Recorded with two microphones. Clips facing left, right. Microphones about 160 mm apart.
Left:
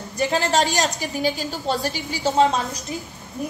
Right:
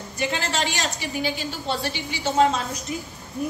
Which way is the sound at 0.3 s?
40° left (ahead or behind).